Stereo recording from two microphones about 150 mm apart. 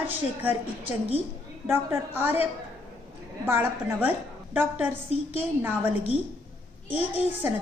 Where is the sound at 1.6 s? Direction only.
15° right (ahead or behind).